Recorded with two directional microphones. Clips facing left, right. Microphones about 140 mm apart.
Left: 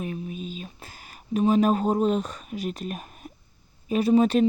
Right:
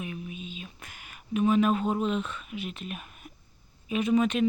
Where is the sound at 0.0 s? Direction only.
40° left (ahead or behind).